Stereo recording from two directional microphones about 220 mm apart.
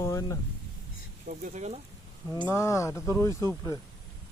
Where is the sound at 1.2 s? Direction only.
35° right (ahead or behind).